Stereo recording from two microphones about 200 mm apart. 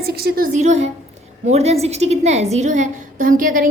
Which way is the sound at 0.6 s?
35° right (ahead or behind).